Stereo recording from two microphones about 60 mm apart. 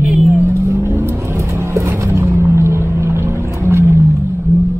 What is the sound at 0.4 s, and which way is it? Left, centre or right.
Vehicle, right.